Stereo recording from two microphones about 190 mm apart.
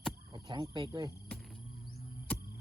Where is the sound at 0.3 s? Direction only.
25° right (ahead or behind).